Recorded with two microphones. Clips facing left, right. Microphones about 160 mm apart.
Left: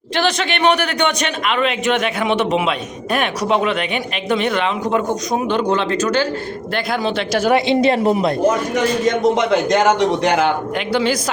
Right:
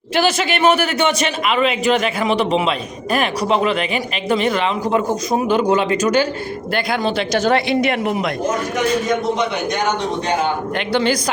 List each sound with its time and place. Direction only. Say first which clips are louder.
0.2 s a man's voice: right 1 dB; 5° right (ahead or behind)
6.7 s a man's voice: right 1 dB; centre (ahead or behind)
7.7 s speech: left 3 dB; 30° left (ahead or behind)
9.0 s a man's voice: left 4 dB; 90° left
10.8 s a man's voice: right 3 dB; 5° left (ahead or behind)